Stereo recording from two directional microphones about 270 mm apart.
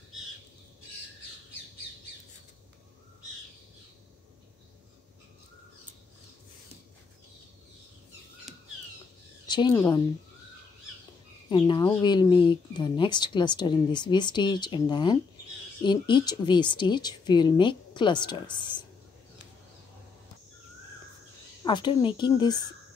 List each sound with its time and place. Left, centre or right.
9.5 s a woman's voice: centre
11.4 s a woman's voice: centre
21.6 s a woman's voice: centre